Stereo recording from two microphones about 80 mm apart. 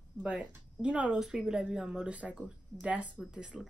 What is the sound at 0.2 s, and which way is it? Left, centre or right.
Speech, centre.